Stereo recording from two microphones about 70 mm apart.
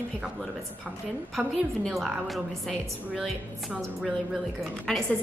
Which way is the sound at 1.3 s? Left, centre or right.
Centre.